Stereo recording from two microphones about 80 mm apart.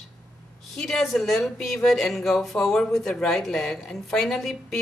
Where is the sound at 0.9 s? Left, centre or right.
Centre.